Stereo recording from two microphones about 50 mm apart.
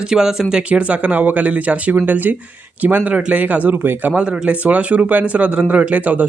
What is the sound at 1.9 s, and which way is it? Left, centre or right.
Speech, right.